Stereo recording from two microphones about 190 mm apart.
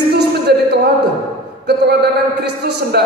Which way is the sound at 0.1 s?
60° right (ahead or behind).